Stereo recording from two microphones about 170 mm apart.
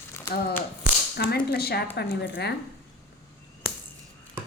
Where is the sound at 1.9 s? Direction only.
80° left.